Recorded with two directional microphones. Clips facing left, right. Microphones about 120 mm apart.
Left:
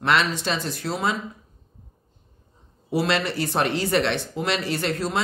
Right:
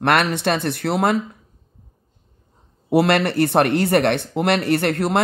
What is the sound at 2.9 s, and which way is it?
Speech, 60° right (ahead or behind).